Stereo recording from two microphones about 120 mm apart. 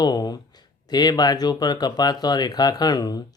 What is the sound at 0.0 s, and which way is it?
Speech, 35° left (ahead or behind).